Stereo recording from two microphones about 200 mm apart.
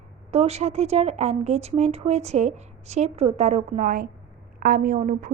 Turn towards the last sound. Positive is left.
turn(degrees=-40)  # may be behind; listen again after turning